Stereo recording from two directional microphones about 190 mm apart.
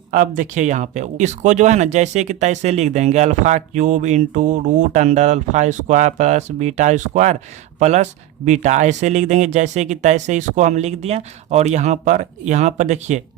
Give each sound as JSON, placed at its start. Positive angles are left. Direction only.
{"t": 0.1, "sound": "speech", "side_deg": -45}